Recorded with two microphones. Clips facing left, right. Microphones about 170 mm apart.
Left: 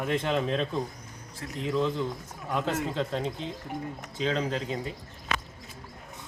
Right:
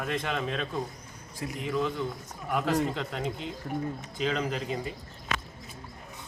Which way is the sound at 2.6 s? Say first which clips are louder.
Right 1 dB; 25° left (ahead or behind).